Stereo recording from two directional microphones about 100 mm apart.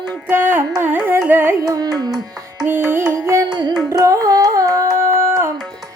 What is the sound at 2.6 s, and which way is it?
Music, 20° right (ahead or behind).